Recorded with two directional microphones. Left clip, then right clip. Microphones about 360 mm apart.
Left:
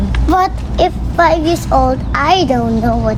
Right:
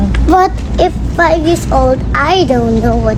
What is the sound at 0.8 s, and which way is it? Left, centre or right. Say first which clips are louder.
A child's voice: right 1 dB; left.